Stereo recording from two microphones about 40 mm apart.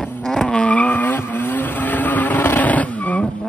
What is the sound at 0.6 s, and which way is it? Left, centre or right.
Vehicle, left.